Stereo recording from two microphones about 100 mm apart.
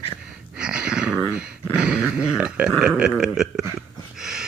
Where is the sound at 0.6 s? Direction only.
10° right (ahead or behind).